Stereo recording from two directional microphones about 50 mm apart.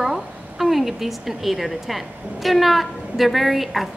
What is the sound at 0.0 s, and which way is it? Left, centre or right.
A woman's voice, centre.